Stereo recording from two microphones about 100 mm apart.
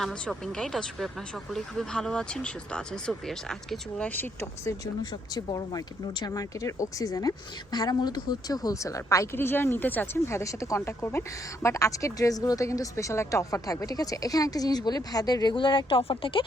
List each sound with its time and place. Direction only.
0.0 s speech: 5° left (ahead or behind); by 4.7 s 20° left (ahead or behind)
5.3 s speech: 40° left (ahead or behind); by 16.4 s 65° left (ahead or behind)